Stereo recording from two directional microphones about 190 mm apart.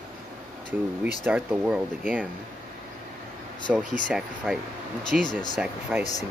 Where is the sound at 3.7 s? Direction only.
5° right (ahead or behind).